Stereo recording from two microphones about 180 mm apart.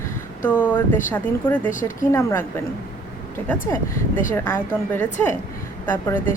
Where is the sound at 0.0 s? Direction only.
10° left (ahead or behind).